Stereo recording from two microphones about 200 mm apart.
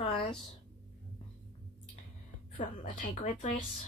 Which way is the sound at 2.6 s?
40° left (ahead or behind).